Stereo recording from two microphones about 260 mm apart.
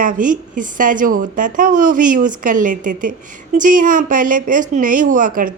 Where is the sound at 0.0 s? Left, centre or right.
Right.